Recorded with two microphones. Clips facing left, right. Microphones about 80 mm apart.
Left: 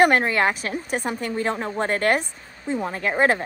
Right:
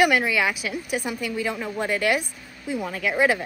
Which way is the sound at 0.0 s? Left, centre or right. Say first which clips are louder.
Left 3 dB; left.